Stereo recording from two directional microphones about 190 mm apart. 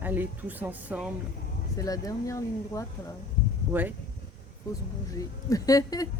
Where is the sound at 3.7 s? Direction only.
10° right (ahead or behind).